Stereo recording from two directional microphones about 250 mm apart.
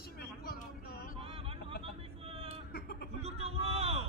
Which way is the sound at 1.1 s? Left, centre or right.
Right.